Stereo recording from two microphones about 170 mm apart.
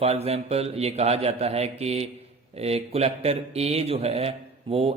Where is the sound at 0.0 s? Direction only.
35° right (ahead or behind).